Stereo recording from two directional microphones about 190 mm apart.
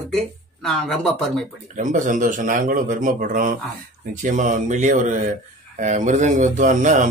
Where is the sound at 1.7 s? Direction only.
40° right (ahead or behind).